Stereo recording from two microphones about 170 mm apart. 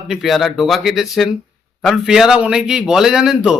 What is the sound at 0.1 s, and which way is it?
A man's voice, centre (ahead or behind).